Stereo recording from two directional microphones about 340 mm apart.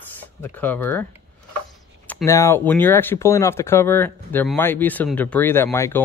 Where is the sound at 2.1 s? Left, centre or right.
Centre.